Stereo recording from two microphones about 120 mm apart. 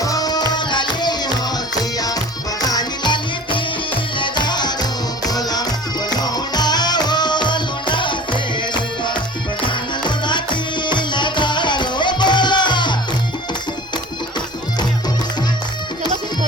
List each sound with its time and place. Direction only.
0.0 s music: 30° left (ahead or behind)